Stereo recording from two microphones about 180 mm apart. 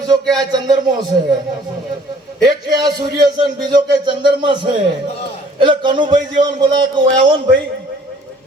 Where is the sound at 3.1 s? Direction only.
25° right (ahead or behind).